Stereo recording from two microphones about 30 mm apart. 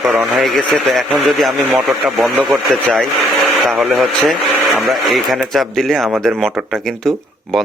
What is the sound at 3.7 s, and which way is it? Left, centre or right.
A man's voice, centre.